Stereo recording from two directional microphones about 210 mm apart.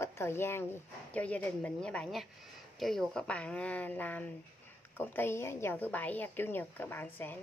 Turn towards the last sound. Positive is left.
turn(degrees=10)  # may be behind; listen again after turning